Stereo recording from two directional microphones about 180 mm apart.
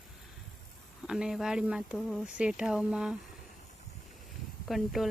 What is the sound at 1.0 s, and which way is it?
Speech, 5° right (ahead or behind).